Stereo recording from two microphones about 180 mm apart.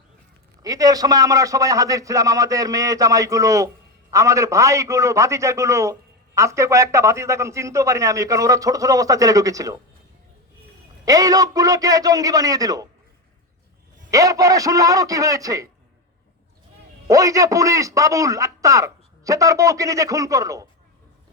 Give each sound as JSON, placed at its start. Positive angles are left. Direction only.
{"t": 0.6, "sound": "a man's voice", "side_deg": -20}
{"t": 11.0, "sound": "a man's voice", "side_deg": -20}
{"t": 14.1, "sound": "a man's voice", "side_deg": -20}
{"t": 17.1, "sound": "a man's voice", "side_deg": -20}